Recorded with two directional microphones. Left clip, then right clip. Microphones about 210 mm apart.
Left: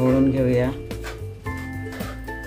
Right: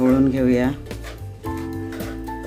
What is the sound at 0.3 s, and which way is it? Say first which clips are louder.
Music: right 1 dB; 55° right (ahead or behind).